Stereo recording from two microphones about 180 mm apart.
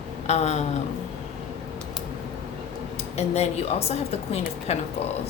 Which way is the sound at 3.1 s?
35° left (ahead or behind).